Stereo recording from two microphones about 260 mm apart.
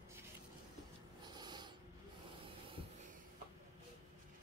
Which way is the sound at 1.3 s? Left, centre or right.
Centre.